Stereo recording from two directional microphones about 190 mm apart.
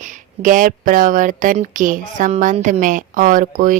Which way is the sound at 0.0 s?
40° right (ahead or behind).